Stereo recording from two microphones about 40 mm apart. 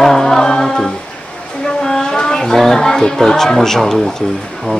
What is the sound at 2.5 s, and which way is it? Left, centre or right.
Speech, centre.